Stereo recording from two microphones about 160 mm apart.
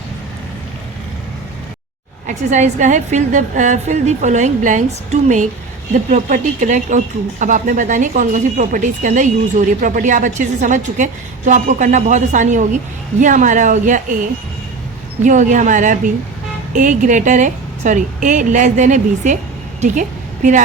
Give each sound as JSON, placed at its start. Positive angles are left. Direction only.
{"t": 2.2, "sound": "a woman's voice", "side_deg": -50}